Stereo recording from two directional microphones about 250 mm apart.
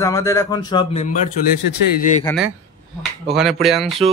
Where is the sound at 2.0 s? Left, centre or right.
Left.